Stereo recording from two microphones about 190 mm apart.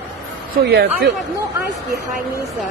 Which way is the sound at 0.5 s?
60° right (ahead or behind).